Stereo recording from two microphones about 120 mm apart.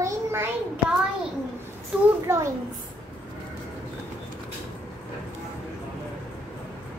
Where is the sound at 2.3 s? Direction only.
20° right (ahead or behind).